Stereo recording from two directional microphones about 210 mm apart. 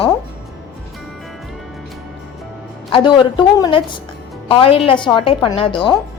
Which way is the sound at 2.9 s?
20° left (ahead or behind).